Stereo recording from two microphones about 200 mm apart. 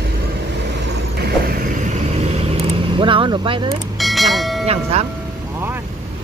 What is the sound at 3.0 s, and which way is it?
Speech, 25° right (ahead or behind).